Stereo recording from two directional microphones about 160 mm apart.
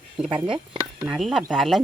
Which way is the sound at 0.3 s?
30° right (ahead or behind).